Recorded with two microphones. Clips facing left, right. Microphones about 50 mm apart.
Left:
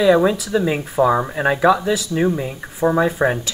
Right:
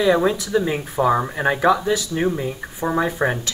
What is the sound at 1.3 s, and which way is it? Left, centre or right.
Speech, left.